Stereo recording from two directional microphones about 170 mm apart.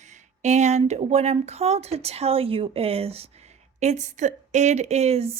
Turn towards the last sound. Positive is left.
turn(degrees=-40)  # may be behind; listen again after turning